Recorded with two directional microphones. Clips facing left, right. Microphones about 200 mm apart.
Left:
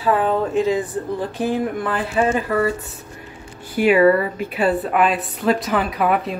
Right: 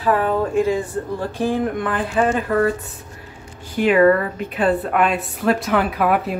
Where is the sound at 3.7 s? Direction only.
10° left (ahead or behind).